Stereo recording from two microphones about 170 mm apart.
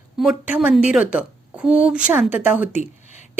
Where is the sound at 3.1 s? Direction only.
45° left (ahead or behind).